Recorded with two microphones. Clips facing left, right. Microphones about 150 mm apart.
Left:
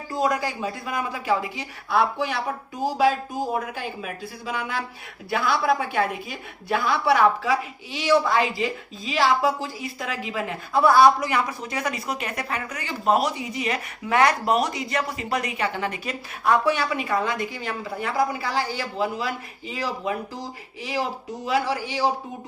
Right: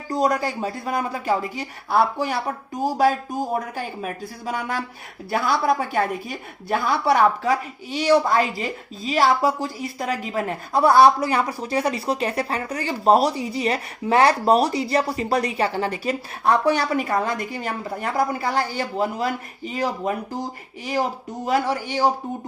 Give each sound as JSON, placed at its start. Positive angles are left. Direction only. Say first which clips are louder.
{"t": 0.1, "sound": "a woman's voice", "louder": "right 3 dB", "side_deg": -40}